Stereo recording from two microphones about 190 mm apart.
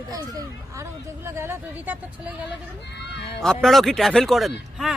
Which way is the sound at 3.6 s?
Centre (ahead or behind).